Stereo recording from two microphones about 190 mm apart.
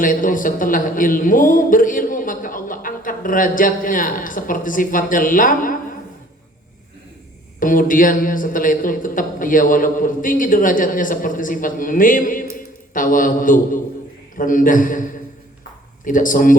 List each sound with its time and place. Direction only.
0.0 s a man's voice: 45° left (ahead or behind)
7.6 s a man's voice: 45° left (ahead or behind)
12.5 s mantra: 45° left (ahead or behind)
14.3 s a man's voice: 45° left (ahead or behind)